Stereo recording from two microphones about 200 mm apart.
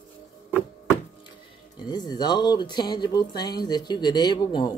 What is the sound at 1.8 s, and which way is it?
Speech, 20° left (ahead or behind).